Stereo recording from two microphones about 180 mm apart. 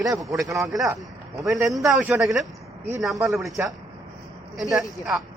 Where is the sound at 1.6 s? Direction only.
15° right (ahead or behind).